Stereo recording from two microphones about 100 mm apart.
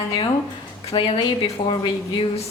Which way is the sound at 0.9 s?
65° left (ahead or behind).